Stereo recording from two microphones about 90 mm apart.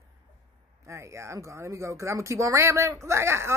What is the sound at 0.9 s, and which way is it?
Speech, 35° right (ahead or behind).